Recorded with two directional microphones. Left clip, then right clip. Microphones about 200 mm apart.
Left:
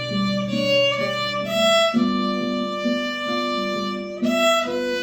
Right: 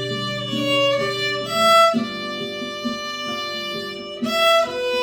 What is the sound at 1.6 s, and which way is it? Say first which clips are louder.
Violin: right 4 dB; 50° right (ahead or behind).